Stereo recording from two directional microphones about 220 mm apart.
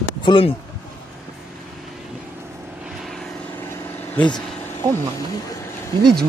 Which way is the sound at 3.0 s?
Centre (ahead or behind).